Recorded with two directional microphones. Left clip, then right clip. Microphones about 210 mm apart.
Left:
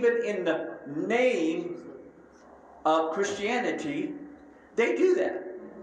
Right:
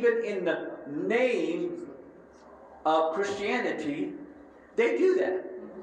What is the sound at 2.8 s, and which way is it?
Speech, 35° left (ahead or behind).